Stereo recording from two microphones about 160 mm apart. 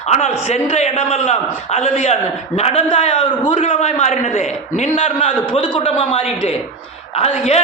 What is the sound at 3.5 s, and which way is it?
A man's voice, 50° left (ahead or behind).